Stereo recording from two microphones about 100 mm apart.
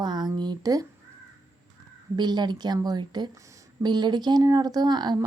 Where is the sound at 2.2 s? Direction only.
45° right (ahead or behind).